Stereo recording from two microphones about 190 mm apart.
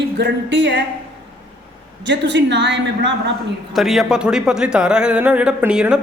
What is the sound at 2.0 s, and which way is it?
A woman's voice, 70° right (ahead or behind).